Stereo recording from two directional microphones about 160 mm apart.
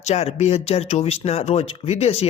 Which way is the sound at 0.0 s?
40° left (ahead or behind).